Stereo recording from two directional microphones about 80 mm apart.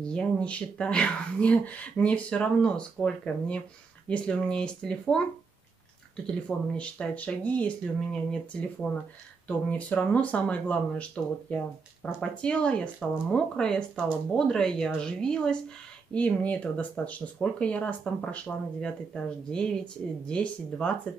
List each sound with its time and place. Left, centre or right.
0.0 s speech: centre
6.2 s speech: centre